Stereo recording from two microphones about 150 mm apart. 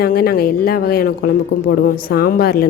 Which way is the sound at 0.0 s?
90° left.